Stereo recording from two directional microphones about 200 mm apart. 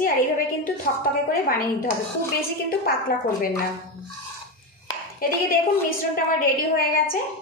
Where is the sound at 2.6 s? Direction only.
45° left (ahead or behind).